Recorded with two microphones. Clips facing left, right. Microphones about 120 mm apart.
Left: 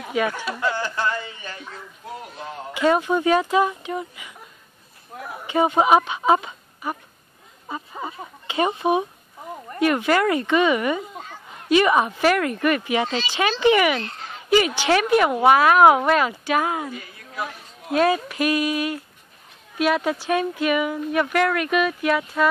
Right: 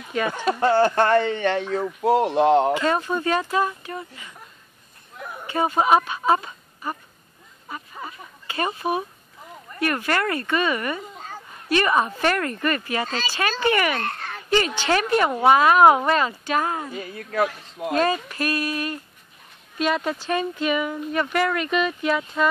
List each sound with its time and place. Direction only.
0.1 s speech: 5° left (ahead or behind)
0.5 s speech: 45° right (ahead or behind)
0.7 s speech: 55° right (ahead or behind); by 2.7 s 90° right
2.7 s speech: 10° left (ahead or behind)
5.5 s speech: 15° left (ahead or behind)
7.6 s speech: 20° left (ahead or behind)
13.9 s a sound: 60° right (ahead or behind)
14.5 s speech: 10° left (ahead or behind)
17.3 s speech: 75° right (ahead or behind)
17.9 s speech: 10° left (ahead or behind)